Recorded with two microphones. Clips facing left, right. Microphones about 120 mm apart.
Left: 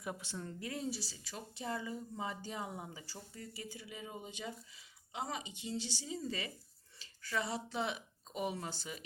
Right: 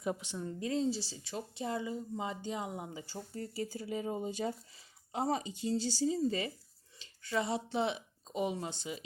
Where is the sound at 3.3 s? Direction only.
35° right (ahead or behind).